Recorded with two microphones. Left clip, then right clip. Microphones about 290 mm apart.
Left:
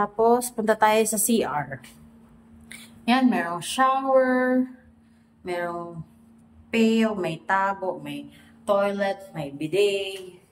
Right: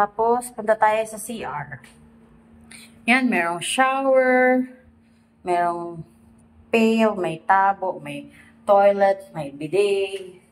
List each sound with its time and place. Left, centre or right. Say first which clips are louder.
0.0 s a woman's voice: right 1 dB; centre
2.7 s speech: right 4 dB; centre
7.0 s speech: right 5 dB; centre